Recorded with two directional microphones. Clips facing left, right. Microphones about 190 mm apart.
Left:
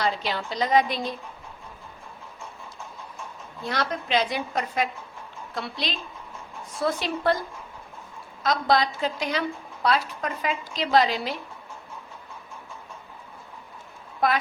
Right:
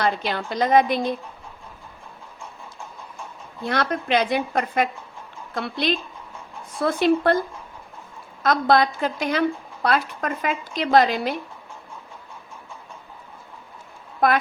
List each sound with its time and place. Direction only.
0.0 s a woman's voice: 55° right (ahead or behind)
3.7 s a woman's voice: 55° right (ahead or behind)
8.4 s a woman's voice: 55° right (ahead or behind)
14.2 s a woman's voice: 55° right (ahead or behind)